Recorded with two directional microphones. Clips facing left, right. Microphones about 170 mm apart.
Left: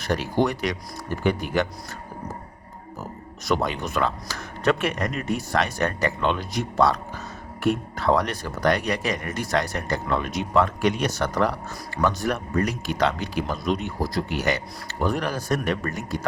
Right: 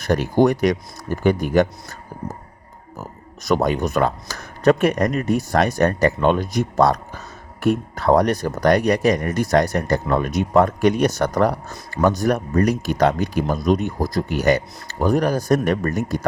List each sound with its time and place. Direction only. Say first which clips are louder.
0.0 s speech: right 6 dB; 45° right (ahead or behind)
3.4 s speech: right 6 dB; 45° right (ahead or behind)